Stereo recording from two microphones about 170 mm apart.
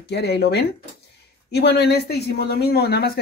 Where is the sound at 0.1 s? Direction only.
75° left (ahead or behind).